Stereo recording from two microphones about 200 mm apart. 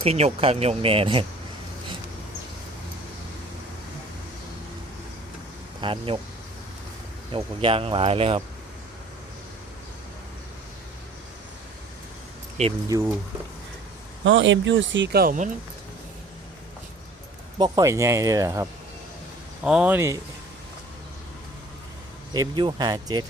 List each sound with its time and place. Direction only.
0.0 s speech: 30° right (ahead or behind)
5.8 s speech: 25° right (ahead or behind)
7.3 s speech: 25° right (ahead or behind)
12.6 s speech: 35° right (ahead or behind)
14.3 s speech: 70° right (ahead or behind); by 15.4 s 45° right (ahead or behind)
17.6 s speech: 15° right (ahead or behind)
19.6 s speech: 5° right (ahead or behind)
22.3 s speech: 20° right (ahead or behind)